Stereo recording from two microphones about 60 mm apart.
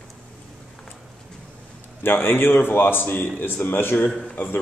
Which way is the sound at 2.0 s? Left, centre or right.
Left.